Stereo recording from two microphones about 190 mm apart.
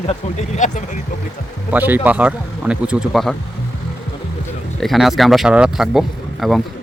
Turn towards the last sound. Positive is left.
turn(degrees=0)  # may be behind; listen again after turning